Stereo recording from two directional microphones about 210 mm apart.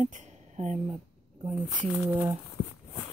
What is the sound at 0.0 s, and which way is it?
Speech, 35° right (ahead or behind).